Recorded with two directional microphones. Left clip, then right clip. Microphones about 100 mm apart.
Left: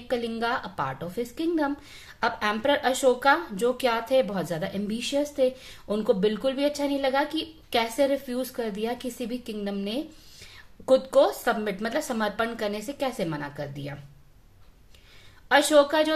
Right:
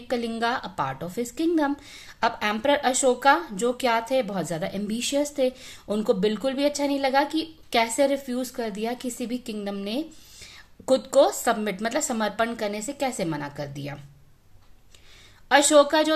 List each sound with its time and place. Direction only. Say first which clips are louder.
0.1 s speech: right 1 dB; 30° right (ahead or behind)
15.4 s speech: right 2 dB; 30° right (ahead or behind)